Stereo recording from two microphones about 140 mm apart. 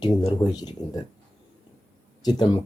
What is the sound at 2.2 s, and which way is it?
Speech, 30° left (ahead or behind).